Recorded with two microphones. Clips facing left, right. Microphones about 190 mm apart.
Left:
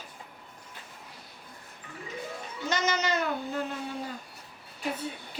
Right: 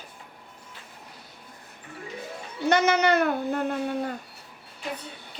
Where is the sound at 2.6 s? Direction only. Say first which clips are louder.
Right 8 dB; 60° right (ahead or behind).